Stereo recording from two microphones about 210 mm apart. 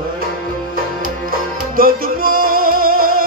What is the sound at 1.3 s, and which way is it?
Music, 45° right (ahead or behind).